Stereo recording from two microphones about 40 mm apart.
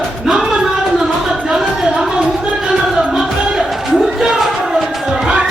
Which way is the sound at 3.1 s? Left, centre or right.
Centre.